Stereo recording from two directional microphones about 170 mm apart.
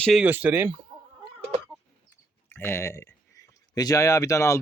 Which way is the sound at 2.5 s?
15° left (ahead or behind).